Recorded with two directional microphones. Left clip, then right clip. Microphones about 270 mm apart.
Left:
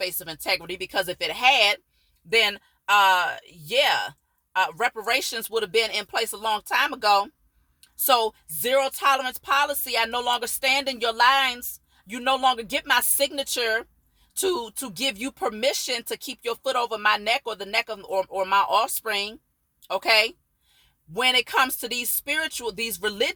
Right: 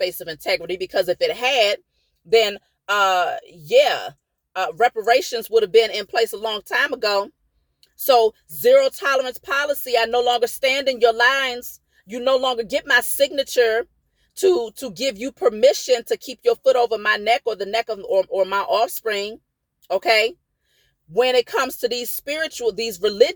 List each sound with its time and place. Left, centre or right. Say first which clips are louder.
0.0 s speech: right 5 dB; centre
3.1 s speech: right 2 dB; centre